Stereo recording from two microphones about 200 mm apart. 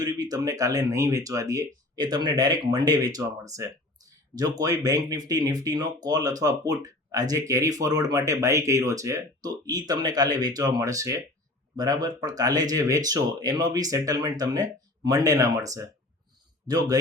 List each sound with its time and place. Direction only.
0.0 s speech: 20° right (ahead or behind)